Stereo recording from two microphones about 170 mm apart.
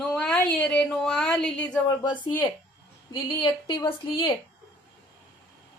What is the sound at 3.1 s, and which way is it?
Speech, 25° left (ahead or behind).